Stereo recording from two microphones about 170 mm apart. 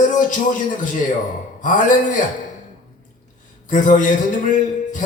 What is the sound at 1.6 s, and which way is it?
Speech, 50° left (ahead or behind).